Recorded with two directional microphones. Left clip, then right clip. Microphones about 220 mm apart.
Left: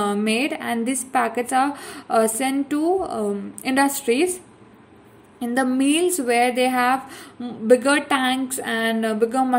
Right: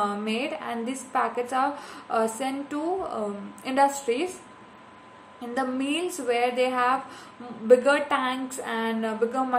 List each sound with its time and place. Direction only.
0.0 s a woman's voice: 40° left (ahead or behind)
5.4 s a woman's voice: 40° left (ahead or behind)